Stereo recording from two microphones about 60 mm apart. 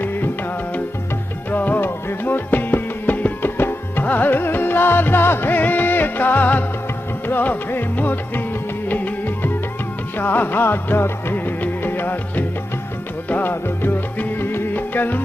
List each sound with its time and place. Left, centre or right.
0.0 s music: left
1.5 s music: left